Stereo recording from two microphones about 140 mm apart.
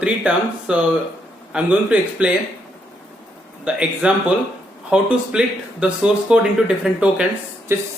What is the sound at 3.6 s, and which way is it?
Speech, 5° right (ahead or behind).